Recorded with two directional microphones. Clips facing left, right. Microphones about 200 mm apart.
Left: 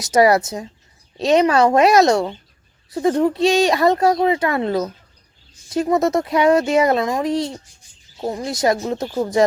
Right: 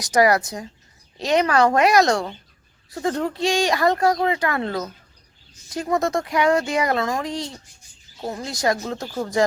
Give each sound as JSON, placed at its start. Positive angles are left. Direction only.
{"t": 0.0, "sound": "a woman's voice", "side_deg": 25}